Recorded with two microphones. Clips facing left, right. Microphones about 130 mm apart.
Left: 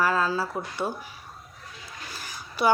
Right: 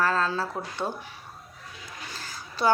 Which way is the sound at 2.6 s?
10° left (ahead or behind).